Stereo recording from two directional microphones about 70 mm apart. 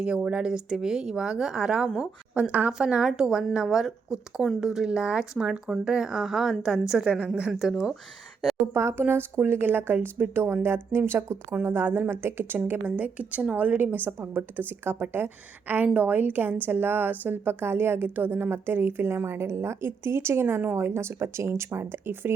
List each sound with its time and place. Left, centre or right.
0.0 s a woman's voice: centre
8.7 s a woman's voice: right